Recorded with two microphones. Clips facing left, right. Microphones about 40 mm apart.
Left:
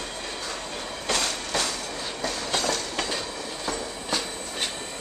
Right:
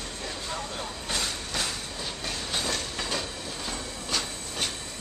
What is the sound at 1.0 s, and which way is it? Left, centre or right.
Train, left.